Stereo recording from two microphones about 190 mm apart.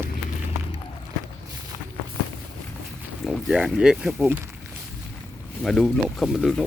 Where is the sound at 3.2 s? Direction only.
5° right (ahead or behind).